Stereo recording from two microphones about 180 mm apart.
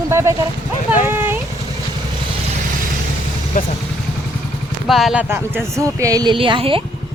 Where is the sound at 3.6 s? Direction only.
45° left (ahead or behind).